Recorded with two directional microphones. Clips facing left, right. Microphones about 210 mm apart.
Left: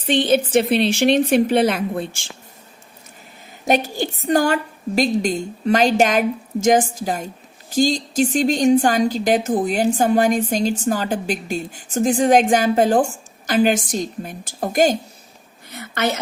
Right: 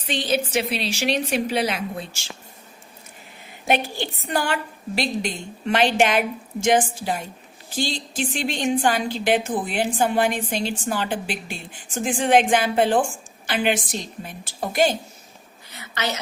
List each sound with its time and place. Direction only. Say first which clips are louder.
0.0 s a woman's voice: left 7 dB; 55° left (ahead or behind)
3.7 s a woman's voice: left 4 dB; 45° left (ahead or behind)
15.7 s a sound: left 6 dB; 50° left (ahead or behind)